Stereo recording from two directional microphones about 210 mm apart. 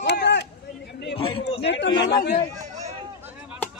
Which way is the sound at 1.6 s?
55° left (ahead or behind).